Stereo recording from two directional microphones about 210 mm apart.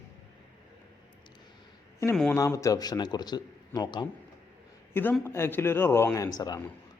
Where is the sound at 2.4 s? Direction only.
15° left (ahead or behind).